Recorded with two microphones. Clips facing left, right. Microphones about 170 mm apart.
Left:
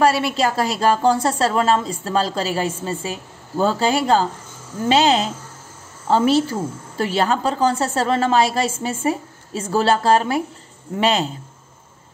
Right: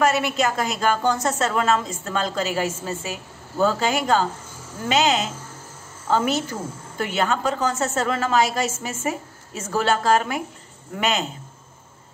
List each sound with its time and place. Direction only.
0.0 s a woman's voice: 30° left (ahead or behind)